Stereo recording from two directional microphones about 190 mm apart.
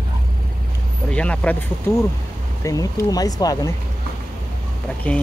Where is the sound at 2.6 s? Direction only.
20° left (ahead or behind).